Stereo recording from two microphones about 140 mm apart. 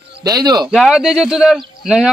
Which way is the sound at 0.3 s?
30° right (ahead or behind).